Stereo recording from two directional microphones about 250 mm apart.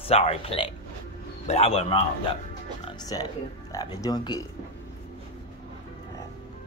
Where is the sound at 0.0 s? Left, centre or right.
Left.